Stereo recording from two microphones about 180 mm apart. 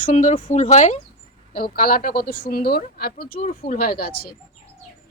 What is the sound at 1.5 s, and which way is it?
Speech, 55° left (ahead or behind).